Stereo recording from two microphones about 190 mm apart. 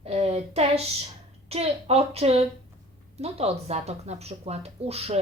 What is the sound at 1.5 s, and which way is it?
A woman's voice, 35° right (ahead or behind).